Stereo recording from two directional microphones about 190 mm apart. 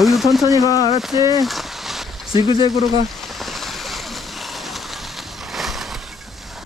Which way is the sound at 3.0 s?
Centre (ahead or behind).